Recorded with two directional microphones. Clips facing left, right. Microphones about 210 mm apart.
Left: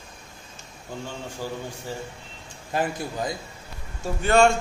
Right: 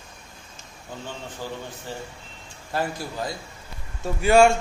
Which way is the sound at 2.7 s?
20° left (ahead or behind).